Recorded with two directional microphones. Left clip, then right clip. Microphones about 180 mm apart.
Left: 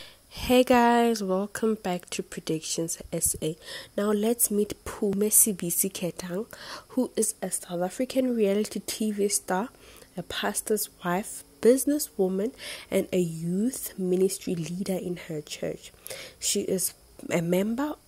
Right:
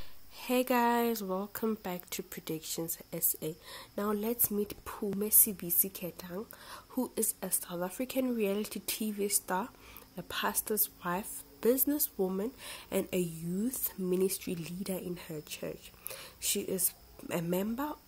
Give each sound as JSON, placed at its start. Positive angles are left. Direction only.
{"t": 0.4, "sound": "a woman's voice", "side_deg": 30}
{"t": 7.0, "sound": "a woman's voice", "side_deg": 25}